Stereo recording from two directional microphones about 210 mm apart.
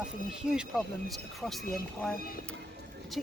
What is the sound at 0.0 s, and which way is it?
Speech, 5° right (ahead or behind).